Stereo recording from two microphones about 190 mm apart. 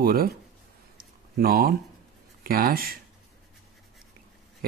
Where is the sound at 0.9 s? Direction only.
50° right (ahead or behind).